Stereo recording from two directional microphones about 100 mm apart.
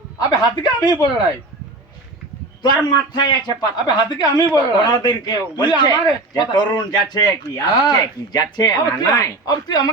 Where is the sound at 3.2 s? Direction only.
45° left (ahead or behind).